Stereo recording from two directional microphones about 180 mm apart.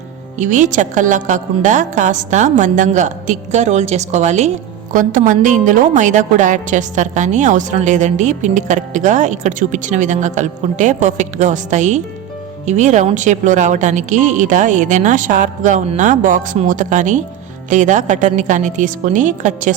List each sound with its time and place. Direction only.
0.3 s a woman's voice: 45° right (ahead or behind)